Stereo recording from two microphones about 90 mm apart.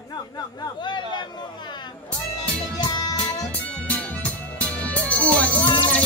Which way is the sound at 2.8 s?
50° left (ahead or behind).